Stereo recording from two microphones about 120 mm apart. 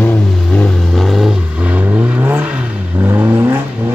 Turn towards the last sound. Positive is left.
turn(degrees=-20)  # may be behind; listen again after turning